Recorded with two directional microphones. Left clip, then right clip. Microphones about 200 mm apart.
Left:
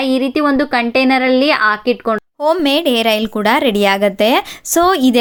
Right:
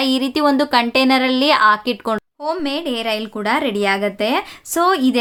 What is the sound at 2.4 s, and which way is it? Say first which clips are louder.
A woman's voice: left 9 dB; 35° left (ahead or behind).